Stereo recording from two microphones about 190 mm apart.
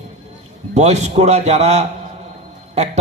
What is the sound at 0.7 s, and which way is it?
A man's voice, 35° right (ahead or behind).